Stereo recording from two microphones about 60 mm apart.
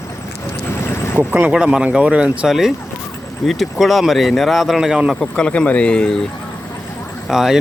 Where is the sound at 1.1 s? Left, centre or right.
Right; by 5.0 s centre.